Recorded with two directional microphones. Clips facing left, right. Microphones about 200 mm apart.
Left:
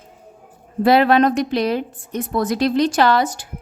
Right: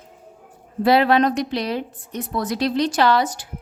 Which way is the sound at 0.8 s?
50° left (ahead or behind).